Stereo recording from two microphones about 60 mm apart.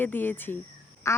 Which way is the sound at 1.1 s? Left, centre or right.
Left.